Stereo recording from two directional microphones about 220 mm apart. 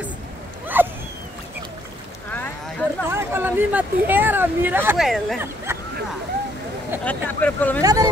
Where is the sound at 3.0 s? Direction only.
10° right (ahead or behind).